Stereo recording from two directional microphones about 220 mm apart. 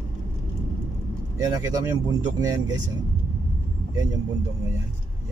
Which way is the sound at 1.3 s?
15° right (ahead or behind).